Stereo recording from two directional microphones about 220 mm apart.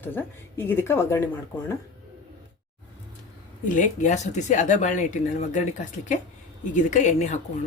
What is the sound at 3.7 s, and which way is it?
Speech, 35° left (ahead or behind).